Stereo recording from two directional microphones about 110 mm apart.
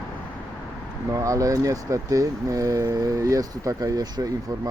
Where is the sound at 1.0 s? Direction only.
30° right (ahead or behind).